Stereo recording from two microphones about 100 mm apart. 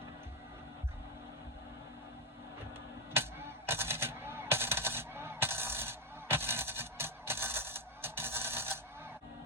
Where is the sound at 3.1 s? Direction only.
25° right (ahead or behind).